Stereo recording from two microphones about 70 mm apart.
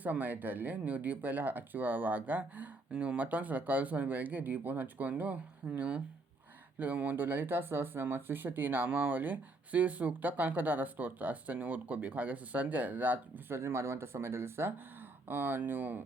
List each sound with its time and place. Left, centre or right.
0.0 s speech: right
13.6 s speech: right